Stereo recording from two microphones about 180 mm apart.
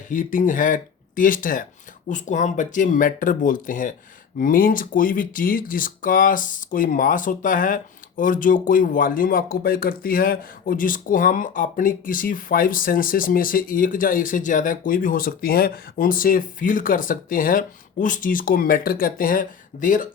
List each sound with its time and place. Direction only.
0.1 s speech: 45° left (ahead or behind)